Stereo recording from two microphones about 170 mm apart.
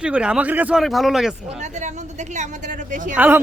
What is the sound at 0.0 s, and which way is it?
Speech, 5° right (ahead or behind).